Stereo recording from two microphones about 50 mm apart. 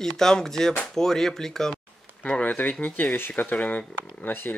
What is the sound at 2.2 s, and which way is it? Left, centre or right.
Speech, left.